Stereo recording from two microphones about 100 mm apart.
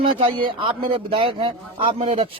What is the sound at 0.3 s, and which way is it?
A man's voice, 55° right (ahead or behind).